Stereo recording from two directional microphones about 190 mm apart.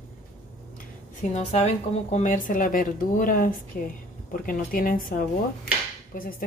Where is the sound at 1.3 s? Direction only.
35° left (ahead or behind).